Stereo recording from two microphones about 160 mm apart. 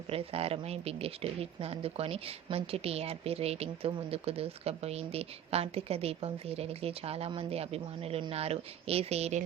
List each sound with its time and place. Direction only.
0.1 s speech: 35° right (ahead or behind)